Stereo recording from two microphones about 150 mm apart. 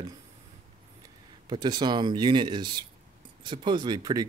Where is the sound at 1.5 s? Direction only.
30° right (ahead or behind).